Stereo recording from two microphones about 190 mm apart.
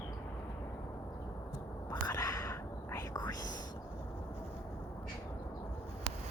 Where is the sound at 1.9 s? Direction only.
20° left (ahead or behind).